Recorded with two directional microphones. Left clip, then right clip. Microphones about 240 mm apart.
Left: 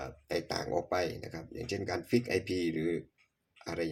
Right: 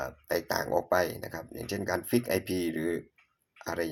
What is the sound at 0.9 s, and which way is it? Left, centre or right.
Speech, right.